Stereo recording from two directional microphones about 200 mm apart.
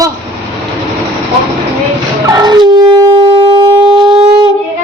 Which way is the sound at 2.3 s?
20° right (ahead or behind).